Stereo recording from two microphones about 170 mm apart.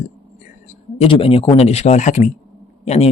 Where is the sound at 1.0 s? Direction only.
35° left (ahead or behind).